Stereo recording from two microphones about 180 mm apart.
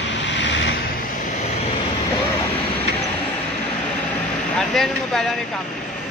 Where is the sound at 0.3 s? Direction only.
90° left.